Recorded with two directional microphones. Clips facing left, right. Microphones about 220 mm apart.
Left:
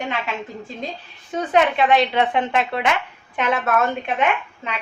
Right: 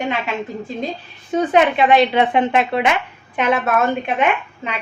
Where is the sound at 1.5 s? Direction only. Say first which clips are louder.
Right 2 dB; 10° right (ahead or behind).